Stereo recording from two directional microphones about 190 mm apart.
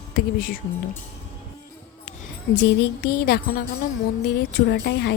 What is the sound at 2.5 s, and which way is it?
Speech, 60° left (ahead or behind).